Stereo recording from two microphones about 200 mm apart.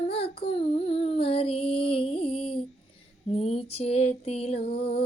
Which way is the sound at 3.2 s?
30° left (ahead or behind).